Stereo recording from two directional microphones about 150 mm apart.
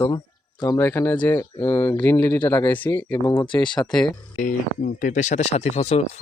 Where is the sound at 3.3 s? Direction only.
30° left (ahead or behind).